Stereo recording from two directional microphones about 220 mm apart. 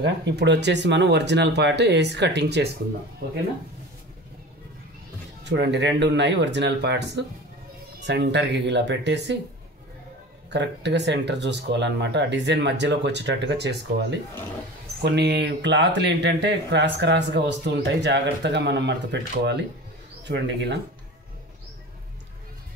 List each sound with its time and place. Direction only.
0.0 s speech: 50° right (ahead or behind)
5.4 s speech: 50° right (ahead or behind)
10.5 s speech: 50° right (ahead or behind)
15.0 s speech: 50° right (ahead or behind)